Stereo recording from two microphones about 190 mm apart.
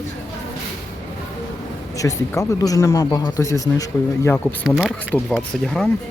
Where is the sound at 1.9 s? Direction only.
15° left (ahead or behind).